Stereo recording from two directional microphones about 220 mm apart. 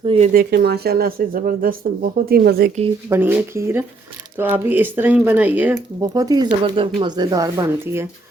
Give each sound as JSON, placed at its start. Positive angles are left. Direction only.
{"t": 0.0, "sound": "speech", "side_deg": -25}
{"t": 0.3, "sound": "speech", "side_deg": -45}
{"t": 3.1, "sound": "speech", "side_deg": -10}